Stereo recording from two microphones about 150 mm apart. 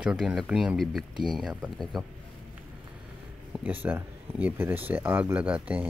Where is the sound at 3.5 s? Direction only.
10° right (ahead or behind).